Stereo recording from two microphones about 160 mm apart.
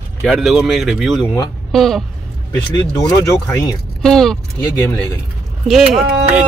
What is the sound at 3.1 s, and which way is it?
Speech, 20° left (ahead or behind).